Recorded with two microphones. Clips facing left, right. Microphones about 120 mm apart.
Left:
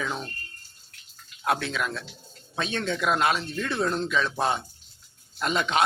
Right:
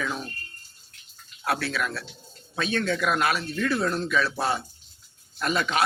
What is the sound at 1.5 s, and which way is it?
Speech, 20° left (ahead or behind).